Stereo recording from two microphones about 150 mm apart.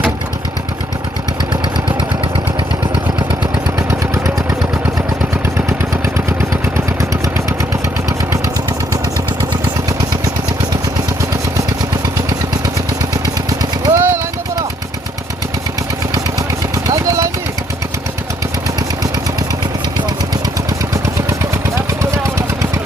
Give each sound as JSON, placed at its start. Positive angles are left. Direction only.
{"t": 13.2, "sound": "vehicle", "side_deg": -25}
{"t": 14.0, "sound": "a sound", "side_deg": -15}
{"t": 16.8, "sound": "vehicle", "side_deg": -25}